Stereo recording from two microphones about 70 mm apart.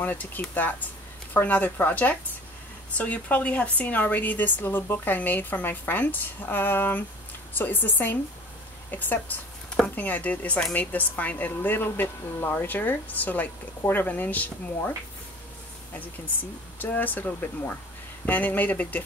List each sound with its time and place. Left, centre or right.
0.0 s a woman's voice: left
15.9 s a woman's voice: left